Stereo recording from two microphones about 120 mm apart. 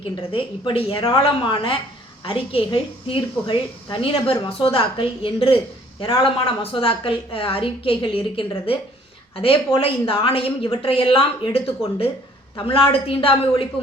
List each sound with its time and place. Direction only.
0.3 s a woman's voice: 50° left (ahead or behind)